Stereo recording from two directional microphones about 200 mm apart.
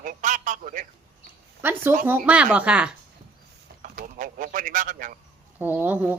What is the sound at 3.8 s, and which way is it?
A man's voice, 40° right (ahead or behind).